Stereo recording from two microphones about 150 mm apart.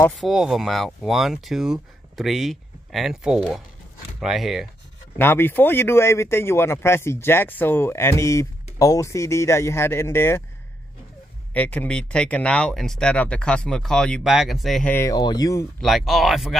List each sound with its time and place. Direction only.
0.1 s speech: centre (ahead or behind)
5.1 s speech: 15° left (ahead or behind)
11.5 s speech: 10° left (ahead or behind)
14.9 s speech: 15° left (ahead or behind)
15.1 s speech: 25° left (ahead or behind)
15.8 s speech: centre (ahead or behind)